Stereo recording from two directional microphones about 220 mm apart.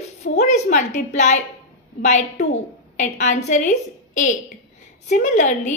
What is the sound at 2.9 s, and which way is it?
Speech, 35° left (ahead or behind).